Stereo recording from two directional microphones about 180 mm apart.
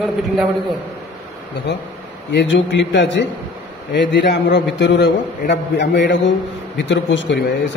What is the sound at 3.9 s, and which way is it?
A man's voice, 70° left (ahead or behind).